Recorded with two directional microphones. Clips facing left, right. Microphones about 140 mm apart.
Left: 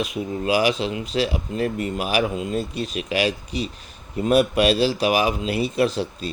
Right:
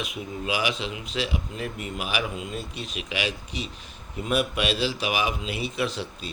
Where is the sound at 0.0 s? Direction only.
40° left (ahead or behind).